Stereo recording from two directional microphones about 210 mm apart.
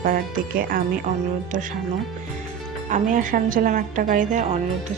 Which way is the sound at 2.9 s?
40° right (ahead or behind).